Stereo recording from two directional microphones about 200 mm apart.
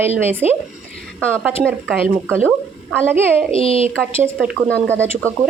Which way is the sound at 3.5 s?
30° left (ahead or behind).